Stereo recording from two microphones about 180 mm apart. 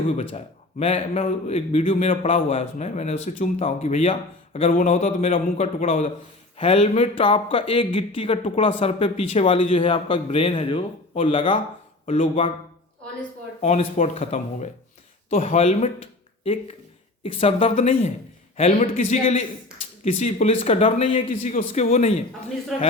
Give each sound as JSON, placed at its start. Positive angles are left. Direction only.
{"t": 0.1, "sound": "a man's voice", "side_deg": 35}
{"t": 5.0, "sound": "a man's voice", "side_deg": 45}
{"t": 12.0, "sound": "speech", "side_deg": 45}
{"t": 13.6, "sound": "a man's voice", "side_deg": 40}
{"t": 21.8, "sound": "speech", "side_deg": 45}